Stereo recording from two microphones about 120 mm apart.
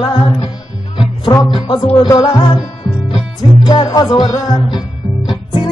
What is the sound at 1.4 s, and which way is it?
A man's voice, 40° left (ahead or behind).